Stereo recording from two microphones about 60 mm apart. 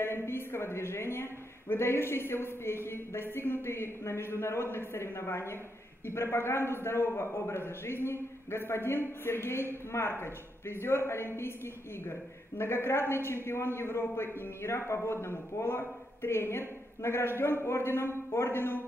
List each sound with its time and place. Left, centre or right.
0.0 s a man's voice: left